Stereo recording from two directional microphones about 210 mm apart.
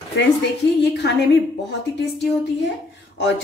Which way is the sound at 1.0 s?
50° left (ahead or behind).